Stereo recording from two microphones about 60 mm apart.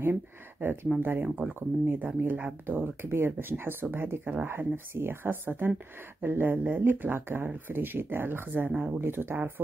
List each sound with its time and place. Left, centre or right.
0.0 s a sound: right
1.0 s speech: right
9.0 s speech: right